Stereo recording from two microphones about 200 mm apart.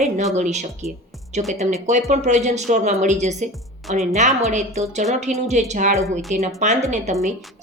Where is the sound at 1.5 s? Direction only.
35° right (ahead or behind).